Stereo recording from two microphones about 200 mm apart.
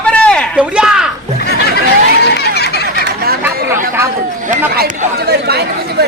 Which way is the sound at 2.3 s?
55° left (ahead or behind).